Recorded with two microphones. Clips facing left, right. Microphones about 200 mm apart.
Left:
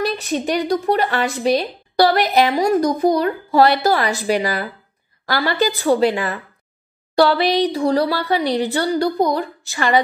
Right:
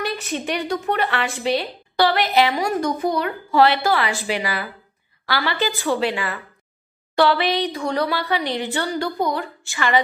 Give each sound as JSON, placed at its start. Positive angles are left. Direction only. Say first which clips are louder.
{"t": 0.0, "sound": "speech", "louder": "left 5 dB", "side_deg": 35}